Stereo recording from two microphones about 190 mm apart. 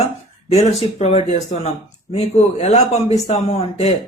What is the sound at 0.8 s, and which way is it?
A man's voice, 35° left (ahead or behind).